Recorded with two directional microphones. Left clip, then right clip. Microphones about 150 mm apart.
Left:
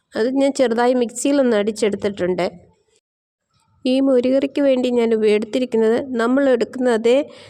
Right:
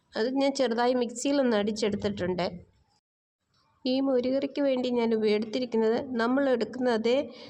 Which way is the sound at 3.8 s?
50° left (ahead or behind).